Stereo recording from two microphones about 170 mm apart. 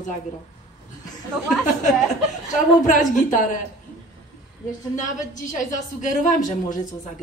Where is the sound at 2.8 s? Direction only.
45° left (ahead or behind).